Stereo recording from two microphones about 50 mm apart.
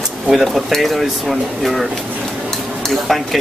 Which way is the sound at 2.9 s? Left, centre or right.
Centre.